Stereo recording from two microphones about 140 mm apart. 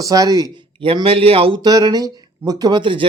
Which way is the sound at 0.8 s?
40° right (ahead or behind).